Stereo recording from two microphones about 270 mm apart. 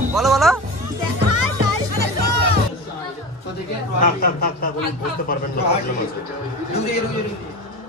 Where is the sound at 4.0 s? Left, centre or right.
Left.